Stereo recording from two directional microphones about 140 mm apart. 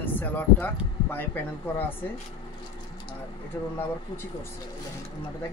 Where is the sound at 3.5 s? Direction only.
15° left (ahead or behind).